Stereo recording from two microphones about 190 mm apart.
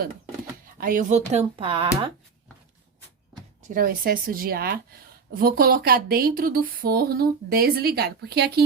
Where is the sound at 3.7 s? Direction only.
50° right (ahead or behind).